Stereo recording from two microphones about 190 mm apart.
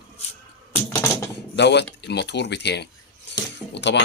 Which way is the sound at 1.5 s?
65° left (ahead or behind).